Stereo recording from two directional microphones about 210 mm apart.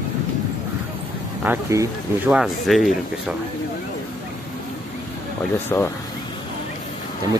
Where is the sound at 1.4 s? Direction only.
10° right (ahead or behind).